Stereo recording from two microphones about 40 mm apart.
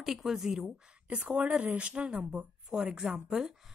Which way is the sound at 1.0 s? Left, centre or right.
Right.